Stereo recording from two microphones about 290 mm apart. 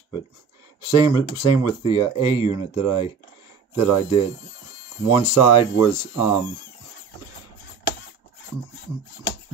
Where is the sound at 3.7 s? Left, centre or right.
Left.